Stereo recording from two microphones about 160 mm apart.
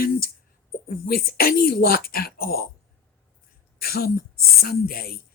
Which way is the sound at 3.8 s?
70° left (ahead or behind).